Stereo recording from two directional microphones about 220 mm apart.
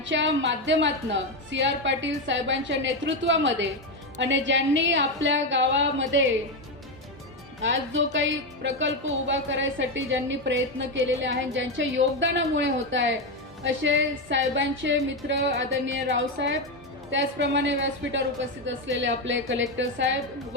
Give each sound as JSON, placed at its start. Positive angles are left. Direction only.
{"t": 0.0, "sound": "a woman's voice", "side_deg": -55}
{"t": 7.6, "sound": "a woman's voice", "side_deg": -55}